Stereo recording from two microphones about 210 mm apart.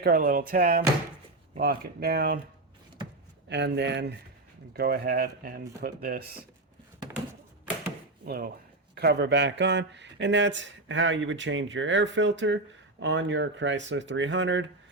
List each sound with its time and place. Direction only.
0.0 s speech: 45° right (ahead or behind)
3.5 s speech: 55° right (ahead or behind)
8.2 s speech: 45° right (ahead or behind); by 14.7 s 60° right (ahead or behind)